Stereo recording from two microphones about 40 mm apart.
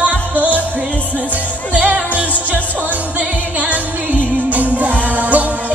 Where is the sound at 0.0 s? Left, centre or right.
Right.